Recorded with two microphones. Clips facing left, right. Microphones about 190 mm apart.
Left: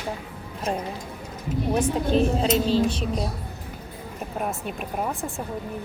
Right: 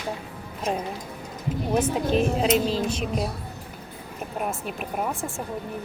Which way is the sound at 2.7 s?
35° left (ahead or behind).